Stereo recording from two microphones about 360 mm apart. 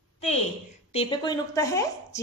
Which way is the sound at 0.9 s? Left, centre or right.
Centre.